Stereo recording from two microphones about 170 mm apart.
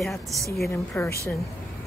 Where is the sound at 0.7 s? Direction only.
10° left (ahead or behind).